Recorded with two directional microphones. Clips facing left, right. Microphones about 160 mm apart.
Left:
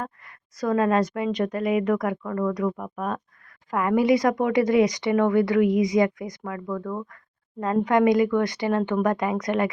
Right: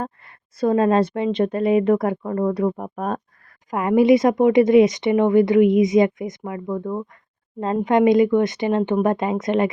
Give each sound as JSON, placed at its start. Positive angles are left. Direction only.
{"t": 0.6, "sound": "speech", "side_deg": -30}
{"t": 3.7, "sound": "speech", "side_deg": -20}